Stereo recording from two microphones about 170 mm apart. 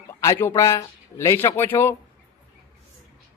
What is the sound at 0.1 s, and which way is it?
A man's voice, 15° left (ahead or behind).